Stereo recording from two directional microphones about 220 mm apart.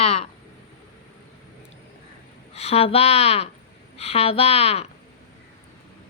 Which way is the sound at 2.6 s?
30° left (ahead or behind).